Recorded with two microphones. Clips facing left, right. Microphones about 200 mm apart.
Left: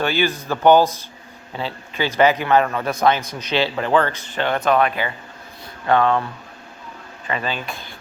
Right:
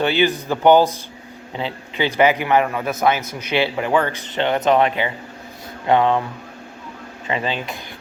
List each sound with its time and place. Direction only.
0.0 s a man's voice: 20° right (ahead or behind)
7.3 s speech: 20° right (ahead or behind)